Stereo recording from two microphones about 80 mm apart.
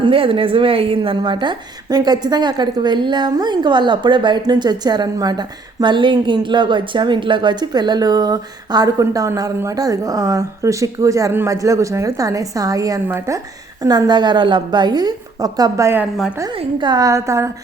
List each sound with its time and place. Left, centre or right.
0.0 s a woman's voice: right
13.1 s a woman's voice: right
14.1 s a woman's voice: right
17.0 s a woman's voice: right